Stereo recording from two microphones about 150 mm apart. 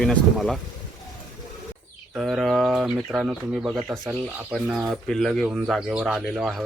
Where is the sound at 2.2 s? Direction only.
Centre (ahead or behind).